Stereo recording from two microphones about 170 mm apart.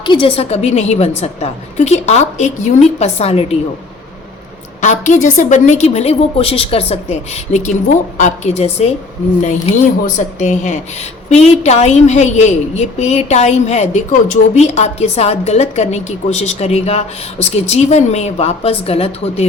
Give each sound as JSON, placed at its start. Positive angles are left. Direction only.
{"t": 0.0, "sound": "a woman's voice", "side_deg": 30}
{"t": 4.8, "sound": "a woman's voice", "side_deg": 45}
{"t": 10.2, "sound": "a woman's voice", "side_deg": 45}